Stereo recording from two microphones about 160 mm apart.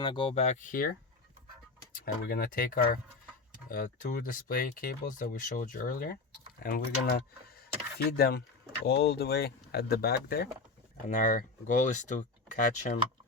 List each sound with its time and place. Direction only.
0.0 s speech: 30° left (ahead or behind); by 0.9 s 60° left (ahead or behind)
2.2 s speech: 65° left (ahead or behind)
11.1 s speech: 55° left (ahead or behind)